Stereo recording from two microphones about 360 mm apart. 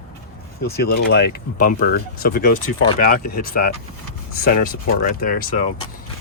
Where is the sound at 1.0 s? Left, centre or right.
Left.